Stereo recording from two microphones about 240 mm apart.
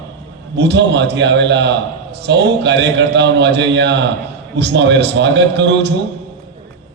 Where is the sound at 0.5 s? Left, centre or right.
Right.